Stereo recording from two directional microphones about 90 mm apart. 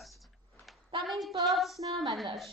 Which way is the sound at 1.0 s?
Centre (ahead or behind).